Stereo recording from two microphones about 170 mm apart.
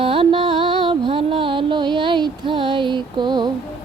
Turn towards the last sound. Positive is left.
turn(degrees=-25)  # may be behind; listen again after turning